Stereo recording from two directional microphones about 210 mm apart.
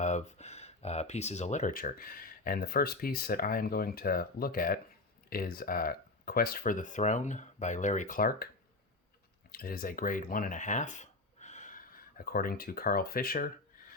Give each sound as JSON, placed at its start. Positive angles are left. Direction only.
{"t": 0.0, "sound": "speech", "side_deg": 35}
{"t": 9.5, "sound": "speech", "side_deg": 45}